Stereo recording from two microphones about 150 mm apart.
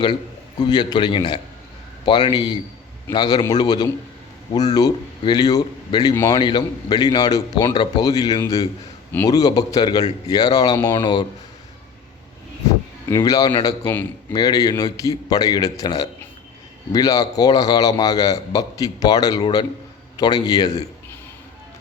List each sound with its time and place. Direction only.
0.6 s a man's voice: 25° left (ahead or behind)
13.1 s a man's voice: 25° left (ahead or behind)
13.8 s speech: 10° left (ahead or behind)
14.3 s a man's voice: 25° left (ahead or behind)